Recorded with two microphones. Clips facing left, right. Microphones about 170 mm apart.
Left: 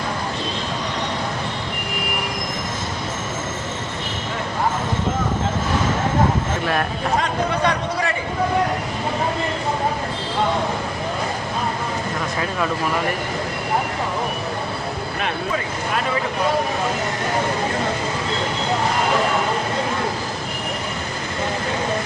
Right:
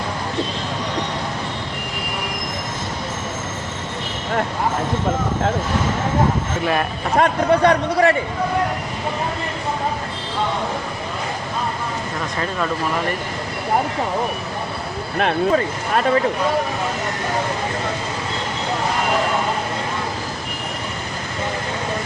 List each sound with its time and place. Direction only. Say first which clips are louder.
7.2 s a man's voice: right 9 dB; 55° right (ahead or behind)